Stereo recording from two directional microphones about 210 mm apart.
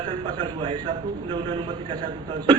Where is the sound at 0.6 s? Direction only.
20° right (ahead or behind).